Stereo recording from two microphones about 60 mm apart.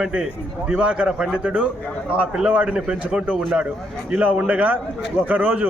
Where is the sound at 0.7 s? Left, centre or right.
Centre.